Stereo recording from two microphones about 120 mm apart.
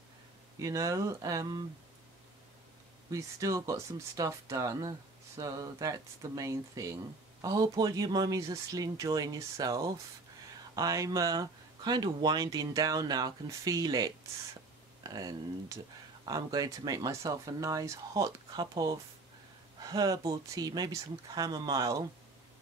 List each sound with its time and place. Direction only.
0.6 s speech: 30° right (ahead or behind)
3.1 s speech: 25° right (ahead or behind)